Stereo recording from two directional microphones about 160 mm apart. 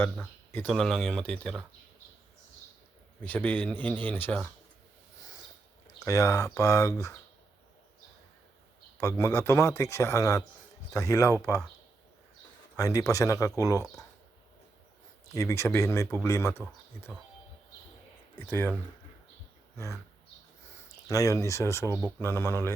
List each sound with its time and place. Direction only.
0.0 s speech: 10° left (ahead or behind)
3.2 s speech: 10° left (ahead or behind)
6.0 s speech: 20° left (ahead or behind)
9.0 s speech: 15° left (ahead or behind)
12.7 s speech: 20° left (ahead or behind)
15.4 s speech: 20° left (ahead or behind)
18.3 s speech: 15° left (ahead or behind)
19.7 s speech: 15° left (ahead or behind)
21.1 s speech: 20° left (ahead or behind)